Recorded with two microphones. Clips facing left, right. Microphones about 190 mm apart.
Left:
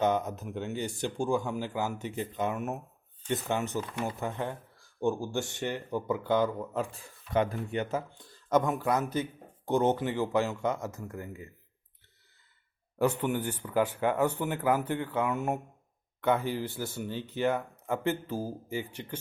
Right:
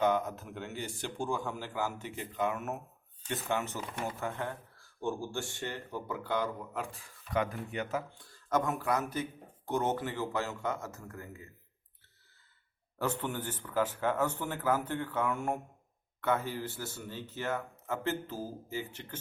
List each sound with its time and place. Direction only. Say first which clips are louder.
0.0 s speech: left 2 dB; 20° left (ahead or behind)
13.0 s speech: left 6 dB; 15° left (ahead or behind)